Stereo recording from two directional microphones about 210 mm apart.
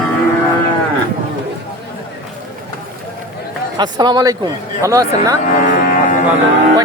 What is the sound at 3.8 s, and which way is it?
A man's voice, 20° right (ahead or behind).